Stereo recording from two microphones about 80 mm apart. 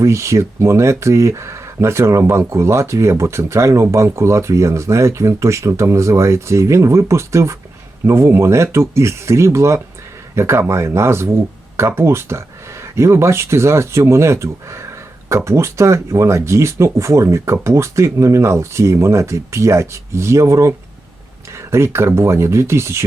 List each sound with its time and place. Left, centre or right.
0.0 s speech: right